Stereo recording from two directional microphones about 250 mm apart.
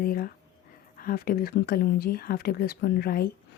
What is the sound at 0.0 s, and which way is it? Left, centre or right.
Speech, left.